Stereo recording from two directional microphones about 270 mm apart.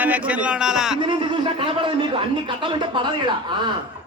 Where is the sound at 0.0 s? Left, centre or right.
Centre.